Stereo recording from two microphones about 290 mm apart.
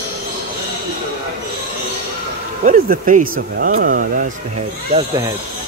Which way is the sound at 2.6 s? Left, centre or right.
Right.